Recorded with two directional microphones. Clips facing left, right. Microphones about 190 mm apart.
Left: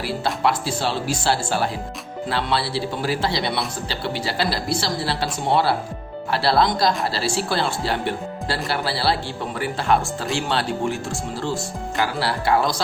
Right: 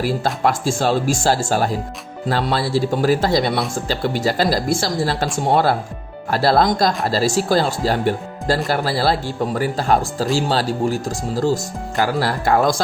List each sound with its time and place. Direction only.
0.4 s speech: 45° right (ahead or behind)